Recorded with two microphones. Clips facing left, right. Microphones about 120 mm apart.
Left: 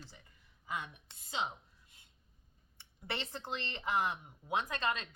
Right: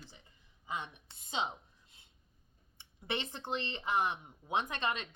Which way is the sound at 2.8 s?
20° right (ahead or behind).